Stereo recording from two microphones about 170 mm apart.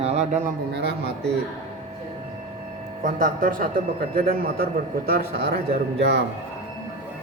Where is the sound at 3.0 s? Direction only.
55° right (ahead or behind); by 6.2 s 70° right (ahead or behind).